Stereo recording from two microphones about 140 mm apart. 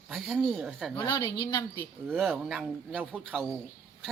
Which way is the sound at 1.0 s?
30° left (ahead or behind).